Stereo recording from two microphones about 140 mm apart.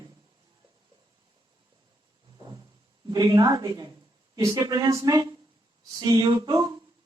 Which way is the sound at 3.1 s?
25° right (ahead or behind).